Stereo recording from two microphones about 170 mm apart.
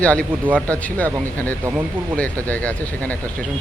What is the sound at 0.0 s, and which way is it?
Speech, 5° left (ahead or behind).